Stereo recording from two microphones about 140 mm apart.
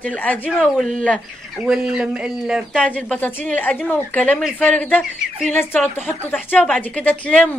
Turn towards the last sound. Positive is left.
turn(degrees=10)  # may be behind; listen again after turning